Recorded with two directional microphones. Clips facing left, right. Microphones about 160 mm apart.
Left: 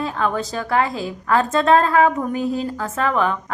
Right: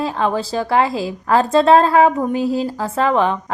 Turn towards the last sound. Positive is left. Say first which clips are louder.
# right 3 dB
turn(degrees=-30)  # may be behind; listen again after turning